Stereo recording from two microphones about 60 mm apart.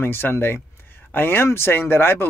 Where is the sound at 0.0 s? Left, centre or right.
Left.